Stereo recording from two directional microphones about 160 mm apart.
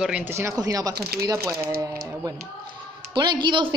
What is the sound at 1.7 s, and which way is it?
Speech, 70° right (ahead or behind).